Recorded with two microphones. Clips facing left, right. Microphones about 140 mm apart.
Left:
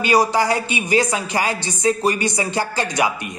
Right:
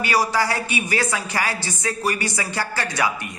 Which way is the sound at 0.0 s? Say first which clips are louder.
Left 4 dB; 20° left (ahead or behind).